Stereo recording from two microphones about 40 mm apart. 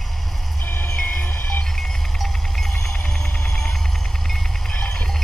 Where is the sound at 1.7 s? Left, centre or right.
Centre.